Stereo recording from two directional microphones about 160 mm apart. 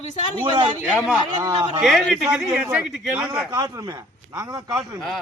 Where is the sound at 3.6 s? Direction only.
20° right (ahead or behind).